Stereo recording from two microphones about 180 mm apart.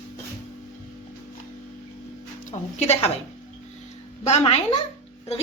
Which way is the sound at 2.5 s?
40° left (ahead or behind).